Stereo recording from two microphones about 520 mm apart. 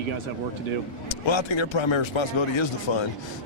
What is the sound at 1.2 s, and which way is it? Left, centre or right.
Speech, left.